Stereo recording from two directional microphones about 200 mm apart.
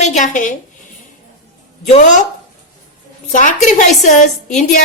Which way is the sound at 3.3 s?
40° left (ahead or behind).